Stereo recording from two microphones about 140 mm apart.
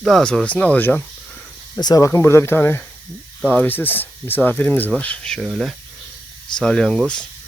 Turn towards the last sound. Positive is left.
turn(degrees=5)  # may be behind; listen again after turning